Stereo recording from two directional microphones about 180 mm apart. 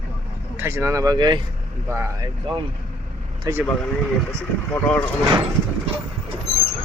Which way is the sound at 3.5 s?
20° right (ahead or behind).